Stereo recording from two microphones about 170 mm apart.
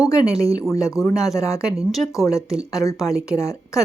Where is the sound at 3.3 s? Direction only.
20° left (ahead or behind).